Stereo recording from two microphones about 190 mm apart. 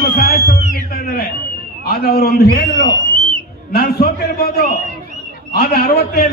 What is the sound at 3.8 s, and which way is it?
A man's voice, 50° left (ahead or behind).